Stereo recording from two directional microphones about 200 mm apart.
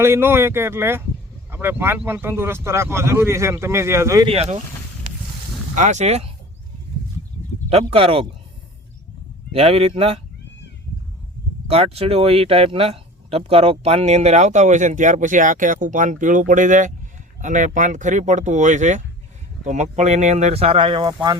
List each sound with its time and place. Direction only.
0.0 s speech: 10° right (ahead or behind)
4.3 s speech: 30° right (ahead or behind)
5.7 s speech: 40° right (ahead or behind)
7.7 s speech: 30° right (ahead or behind)
9.5 s speech: 30° right (ahead or behind)
11.7 s speech: 30° right (ahead or behind)